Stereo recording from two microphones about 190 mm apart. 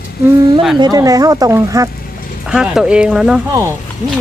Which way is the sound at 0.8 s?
20° right (ahead or behind).